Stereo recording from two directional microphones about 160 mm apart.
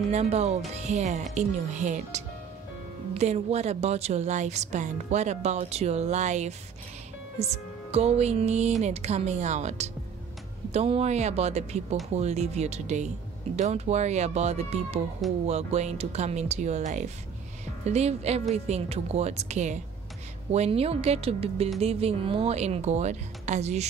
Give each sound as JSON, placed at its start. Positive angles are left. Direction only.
{"t": 0.1, "sound": "a woman's voice", "side_deg": -40}